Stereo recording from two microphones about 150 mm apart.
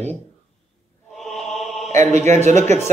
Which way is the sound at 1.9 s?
50° right (ahead or behind).